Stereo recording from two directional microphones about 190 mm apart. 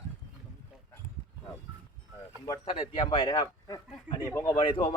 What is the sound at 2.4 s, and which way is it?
A man's voice, 25° left (ahead or behind).